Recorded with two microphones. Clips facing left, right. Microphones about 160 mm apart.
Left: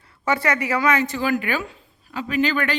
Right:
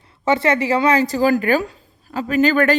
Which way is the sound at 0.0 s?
25° right (ahead or behind).